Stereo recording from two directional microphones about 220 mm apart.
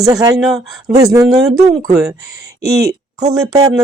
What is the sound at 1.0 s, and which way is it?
Speech, 15° right (ahead or behind).